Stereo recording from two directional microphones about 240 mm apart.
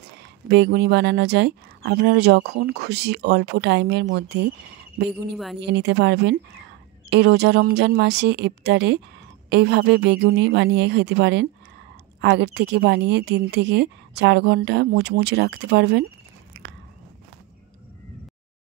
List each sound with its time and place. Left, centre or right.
0.2 s speech: right
5.6 s speech: right